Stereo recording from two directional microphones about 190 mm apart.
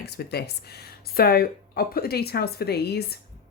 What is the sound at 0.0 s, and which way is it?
Speech, 55° left (ahead or behind).